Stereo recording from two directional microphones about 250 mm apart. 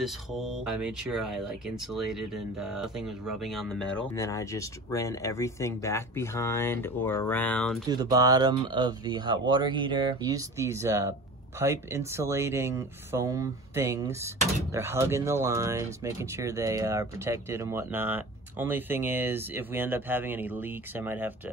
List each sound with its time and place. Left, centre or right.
0.0 s speech: centre
7.9 s speech: centre